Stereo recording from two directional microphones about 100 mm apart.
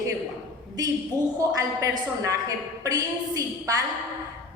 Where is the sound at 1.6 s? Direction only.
35° right (ahead or behind).